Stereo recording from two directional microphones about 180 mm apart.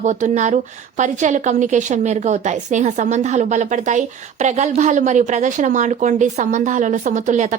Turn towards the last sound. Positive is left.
turn(degrees=-40)  # may be behind; listen again after turning